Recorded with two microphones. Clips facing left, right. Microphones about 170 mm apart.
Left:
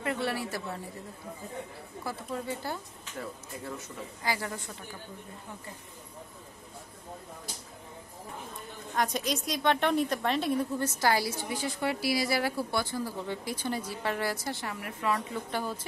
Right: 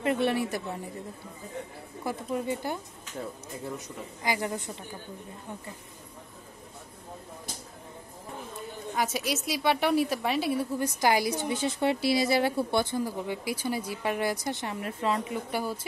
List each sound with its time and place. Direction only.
0.0 s a woman's voice: 20° right (ahead or behind)
2.0 s a woman's voice: 15° right (ahead or behind)
8.9 s a woman's voice: 5° right (ahead or behind)